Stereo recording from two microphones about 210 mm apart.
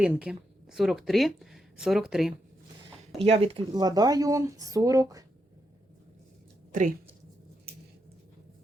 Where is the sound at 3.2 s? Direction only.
30° right (ahead or behind).